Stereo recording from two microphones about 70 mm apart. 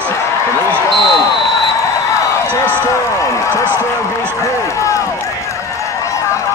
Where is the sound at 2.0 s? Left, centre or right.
Left.